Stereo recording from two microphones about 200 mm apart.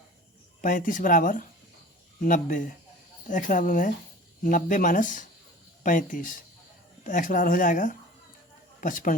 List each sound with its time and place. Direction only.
0.6 s speech: 40° left (ahead or behind)